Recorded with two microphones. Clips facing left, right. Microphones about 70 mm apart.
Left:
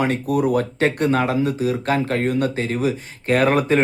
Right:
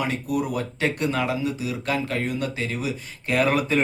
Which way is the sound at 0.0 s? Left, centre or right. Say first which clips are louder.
Left 6 dB; left.